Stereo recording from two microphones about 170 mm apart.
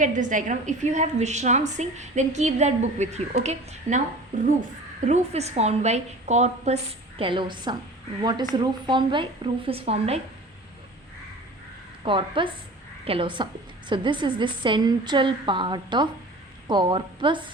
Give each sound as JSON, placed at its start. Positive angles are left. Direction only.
{"t": 0.0, "sound": "a woman's voice", "side_deg": -50}
{"t": 7.2, "sound": "a woman's voice", "side_deg": -30}
{"t": 12.0, "sound": "a woman's voice", "side_deg": -30}